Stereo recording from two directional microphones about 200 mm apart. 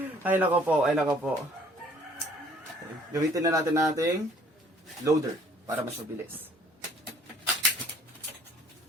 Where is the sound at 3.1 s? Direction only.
15° right (ahead or behind).